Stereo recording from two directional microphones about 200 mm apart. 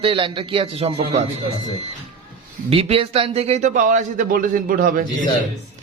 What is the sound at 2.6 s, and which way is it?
A man's voice, 30° right (ahead or behind).